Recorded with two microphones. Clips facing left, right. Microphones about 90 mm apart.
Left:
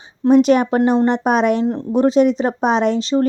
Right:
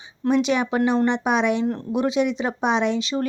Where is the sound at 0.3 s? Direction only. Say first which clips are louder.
Left 8 dB; 45° left (ahead or behind).